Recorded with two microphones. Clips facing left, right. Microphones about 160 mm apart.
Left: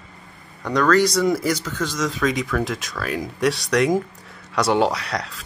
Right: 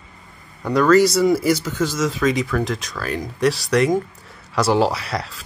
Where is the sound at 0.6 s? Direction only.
5° right (ahead or behind).